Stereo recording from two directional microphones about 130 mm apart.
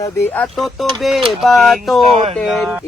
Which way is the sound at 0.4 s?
Centre (ahead or behind).